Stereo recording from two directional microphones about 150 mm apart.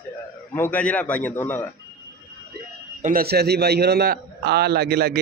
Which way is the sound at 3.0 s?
80° right.